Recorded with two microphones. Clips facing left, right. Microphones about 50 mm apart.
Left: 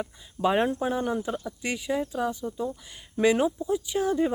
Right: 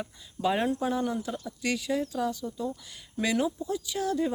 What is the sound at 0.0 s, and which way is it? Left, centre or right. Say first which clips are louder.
Speech: left 3 dB; left.